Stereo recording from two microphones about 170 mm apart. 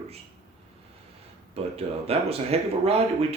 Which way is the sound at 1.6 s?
35° right (ahead or behind).